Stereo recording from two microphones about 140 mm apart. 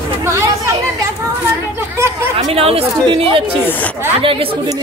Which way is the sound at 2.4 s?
50° right (ahead or behind).